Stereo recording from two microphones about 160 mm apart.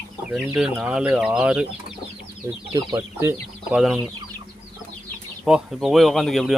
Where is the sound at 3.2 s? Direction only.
15° right (ahead or behind).